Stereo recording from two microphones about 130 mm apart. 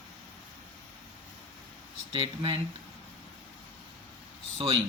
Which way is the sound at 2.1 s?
45° right (ahead or behind).